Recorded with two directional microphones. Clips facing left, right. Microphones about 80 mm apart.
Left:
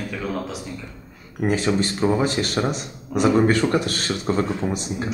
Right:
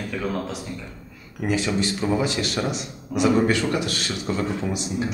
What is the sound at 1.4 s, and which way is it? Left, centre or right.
Speech, left.